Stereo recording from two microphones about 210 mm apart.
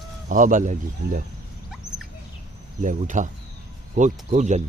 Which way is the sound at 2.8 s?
35° right (ahead or behind).